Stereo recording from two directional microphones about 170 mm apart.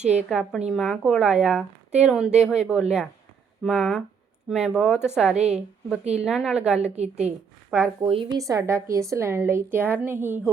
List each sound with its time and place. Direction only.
0.0 s a woman's voice: 40° right (ahead or behind)
0.3 s a woman's voice: centre (ahead or behind)
6.9 s a woman's voice: 40° right (ahead or behind)
7.7 s a woman's voice: centre (ahead or behind)
8.0 s a woman's voice: 30° right (ahead or behind); by 10.4 s 10° right (ahead or behind)